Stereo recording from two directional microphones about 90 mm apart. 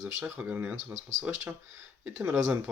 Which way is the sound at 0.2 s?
15° right (ahead or behind).